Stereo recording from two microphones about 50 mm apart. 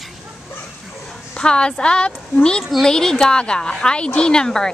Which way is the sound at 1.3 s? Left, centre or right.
Centre.